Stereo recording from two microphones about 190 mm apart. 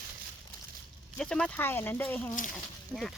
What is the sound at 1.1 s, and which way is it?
Speech, 5° left (ahead or behind).